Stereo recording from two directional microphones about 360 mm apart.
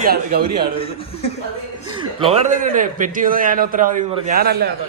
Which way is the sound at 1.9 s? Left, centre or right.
Centre.